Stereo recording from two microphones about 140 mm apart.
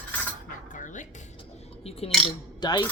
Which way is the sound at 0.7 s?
65° left (ahead or behind).